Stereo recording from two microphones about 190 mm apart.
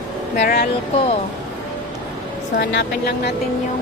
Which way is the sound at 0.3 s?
50° left (ahead or behind).